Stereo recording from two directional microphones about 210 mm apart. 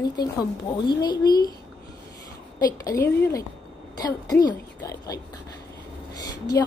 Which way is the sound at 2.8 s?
15° left (ahead or behind).